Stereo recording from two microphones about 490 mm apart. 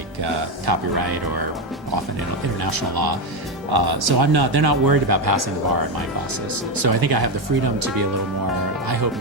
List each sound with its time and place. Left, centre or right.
0.7 s speech: right
2.6 s speech: right
6.7 s speech: right